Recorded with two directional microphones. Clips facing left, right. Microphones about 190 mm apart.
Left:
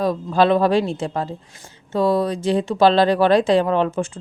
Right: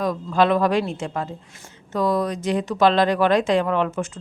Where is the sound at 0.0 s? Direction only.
30° left (ahead or behind).